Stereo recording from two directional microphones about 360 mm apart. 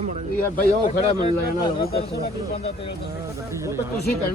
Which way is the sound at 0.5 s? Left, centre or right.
Centre.